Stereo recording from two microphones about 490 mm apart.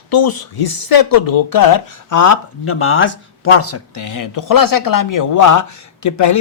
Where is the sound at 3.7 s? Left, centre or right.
Left.